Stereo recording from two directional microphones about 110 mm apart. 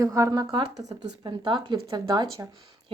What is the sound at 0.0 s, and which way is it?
Speech, 30° right (ahead or behind).